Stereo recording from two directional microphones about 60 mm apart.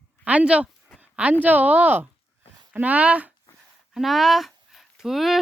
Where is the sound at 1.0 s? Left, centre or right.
Right.